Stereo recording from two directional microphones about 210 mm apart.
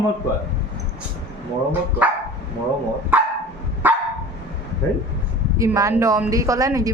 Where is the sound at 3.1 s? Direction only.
10° right (ahead or behind).